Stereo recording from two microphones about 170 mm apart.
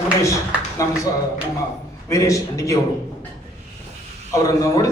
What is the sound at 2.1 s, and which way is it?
Speech, 20° left (ahead or behind).